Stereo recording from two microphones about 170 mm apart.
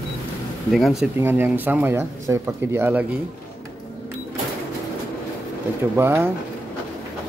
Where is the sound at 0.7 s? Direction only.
Centre (ahead or behind).